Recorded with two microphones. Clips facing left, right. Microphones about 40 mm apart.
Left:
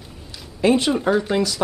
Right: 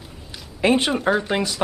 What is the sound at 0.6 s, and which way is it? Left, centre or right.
Speech, right.